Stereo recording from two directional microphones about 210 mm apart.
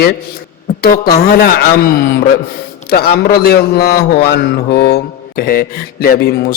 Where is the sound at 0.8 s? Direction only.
45° left (ahead or behind).